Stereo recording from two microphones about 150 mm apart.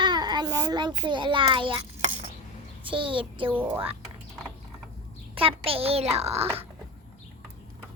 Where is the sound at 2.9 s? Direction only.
35° right (ahead or behind).